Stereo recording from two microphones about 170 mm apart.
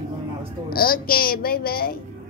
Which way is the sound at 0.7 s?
60° left (ahead or behind).